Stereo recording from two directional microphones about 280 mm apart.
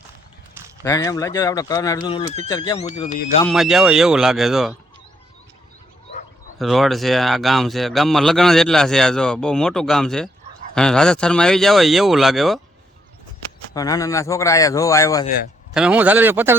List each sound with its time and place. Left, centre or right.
0.8 s a man's voice: centre
3.4 s a man's voice: centre
6.6 s a man's voice: centre
13.7 s a man's voice: centre
15.7 s speech: centre